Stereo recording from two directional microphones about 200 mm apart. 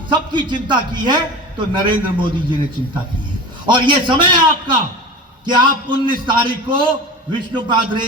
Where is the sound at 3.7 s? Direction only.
25° right (ahead or behind).